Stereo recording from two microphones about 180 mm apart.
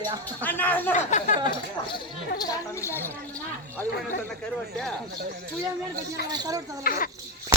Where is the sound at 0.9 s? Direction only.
45° left (ahead or behind).